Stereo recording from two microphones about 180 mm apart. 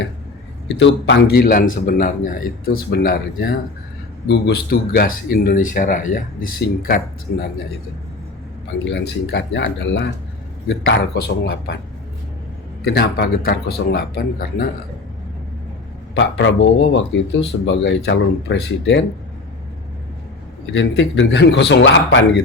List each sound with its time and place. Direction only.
0.8 s a man's voice: 85° left; by 7.0 s 55° left (ahead or behind)
8.8 s a man's voice: 75° left (ahead or behind)
12.8 s a man's voice: 60° left (ahead or behind)
16.1 s speech: 85° left
20.7 s speech: 80° left